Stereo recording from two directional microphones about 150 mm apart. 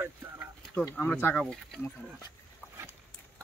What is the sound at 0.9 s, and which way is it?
Speech, 15° left (ahead or behind).